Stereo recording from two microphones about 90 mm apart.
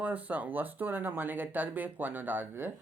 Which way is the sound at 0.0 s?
20° right (ahead or behind).